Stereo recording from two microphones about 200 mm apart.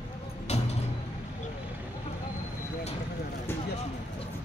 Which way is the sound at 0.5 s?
35° left (ahead or behind).